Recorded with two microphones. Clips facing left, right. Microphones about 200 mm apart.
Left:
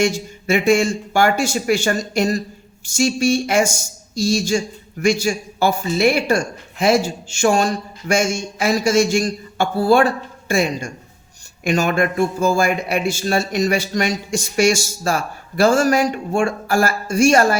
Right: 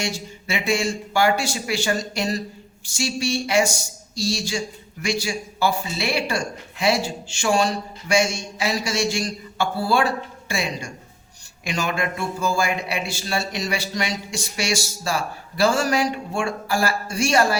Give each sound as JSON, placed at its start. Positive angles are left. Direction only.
{"t": 0.0, "sound": "speech", "side_deg": 50}